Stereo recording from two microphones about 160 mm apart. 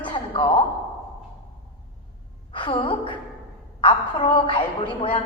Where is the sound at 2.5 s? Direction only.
30° left (ahead or behind).